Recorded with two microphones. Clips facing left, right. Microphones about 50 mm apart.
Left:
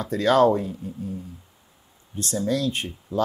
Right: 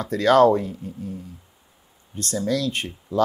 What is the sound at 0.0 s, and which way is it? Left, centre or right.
Speech, right.